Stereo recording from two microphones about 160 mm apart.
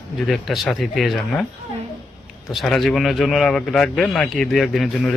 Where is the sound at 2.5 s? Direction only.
Centre (ahead or behind).